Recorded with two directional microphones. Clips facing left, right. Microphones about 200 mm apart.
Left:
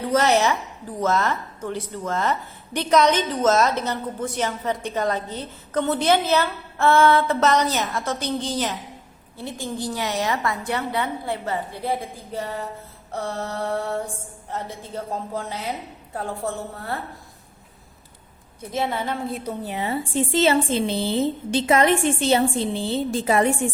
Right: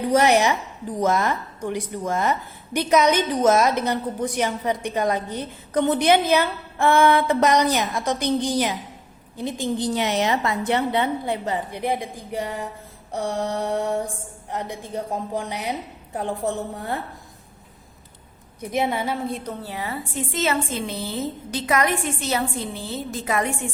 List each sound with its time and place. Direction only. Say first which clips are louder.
0.0 s a woman's voice: right 2 dB; 15° right (ahead or behind)
18.6 s a woman's voice: right 2 dB; 15° right (ahead or behind); by 19.5 s centre (ahead or behind)
19.6 s a woman's voice: left 4 dB; 20° left (ahead or behind)